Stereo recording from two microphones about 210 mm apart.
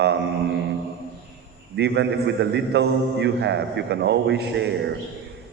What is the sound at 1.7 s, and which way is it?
A man's voice, 55° right (ahead or behind).